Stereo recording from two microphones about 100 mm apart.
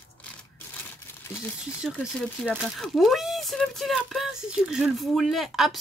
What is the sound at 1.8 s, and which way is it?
Speech, centre (ahead or behind).